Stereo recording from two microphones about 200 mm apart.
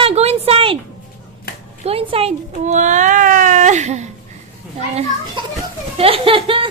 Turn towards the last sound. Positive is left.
turn(degrees=-25)  # may be behind; listen again after turning